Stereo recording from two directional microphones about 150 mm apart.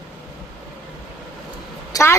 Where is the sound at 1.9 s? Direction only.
20° left (ahead or behind).